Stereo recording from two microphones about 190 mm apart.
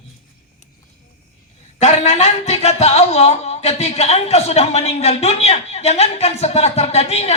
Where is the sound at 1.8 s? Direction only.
35° left (ahead or behind).